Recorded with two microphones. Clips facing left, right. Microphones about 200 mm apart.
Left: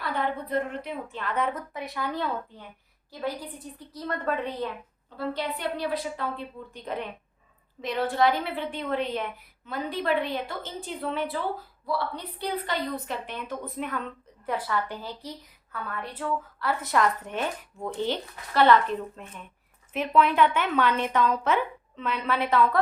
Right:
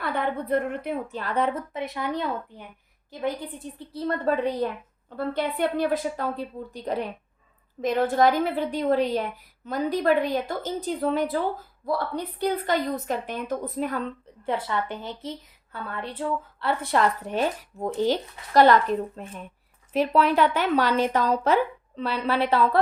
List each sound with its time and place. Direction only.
0.0 s a woman's voice: 55° right (ahead or behind); by 4.7 s 35° right (ahead or behind)
5.1 s a woman's voice: 55° right (ahead or behind); by 22.8 s 30° right (ahead or behind)